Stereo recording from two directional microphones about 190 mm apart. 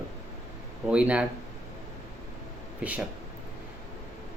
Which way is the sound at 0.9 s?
5° right (ahead or behind).